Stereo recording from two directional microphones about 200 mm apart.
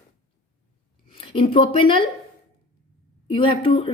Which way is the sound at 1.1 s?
25° left (ahead or behind).